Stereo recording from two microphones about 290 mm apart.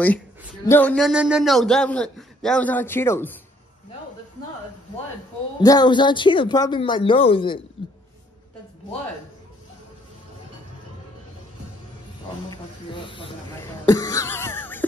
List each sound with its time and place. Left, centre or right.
0.7 s a man's voice: centre
5.6 s a woman's voice: centre
12.4 s snake: centre
13.8 s a sound: centre